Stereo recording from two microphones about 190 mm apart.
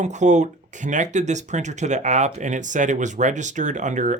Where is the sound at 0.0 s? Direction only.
40° right (ahead or behind).